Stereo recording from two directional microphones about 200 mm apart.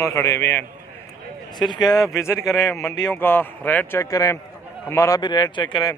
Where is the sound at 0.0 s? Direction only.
15° left (ahead or behind).